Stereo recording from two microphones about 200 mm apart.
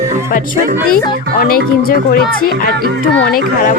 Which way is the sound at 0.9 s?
45° left (ahead or behind).